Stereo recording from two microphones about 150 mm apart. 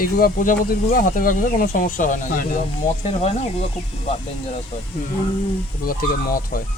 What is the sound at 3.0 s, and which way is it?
Speech, 45° left (ahead or behind).